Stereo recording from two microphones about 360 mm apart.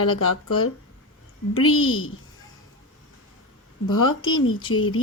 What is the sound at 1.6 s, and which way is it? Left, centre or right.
Speech, left.